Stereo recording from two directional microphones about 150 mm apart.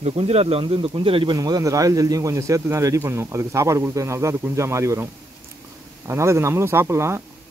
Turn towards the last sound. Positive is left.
turn(degrees=-15)  # may be behind; listen again after turning